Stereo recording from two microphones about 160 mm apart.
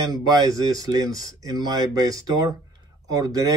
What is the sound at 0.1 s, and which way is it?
A man's voice, 25° right (ahead or behind).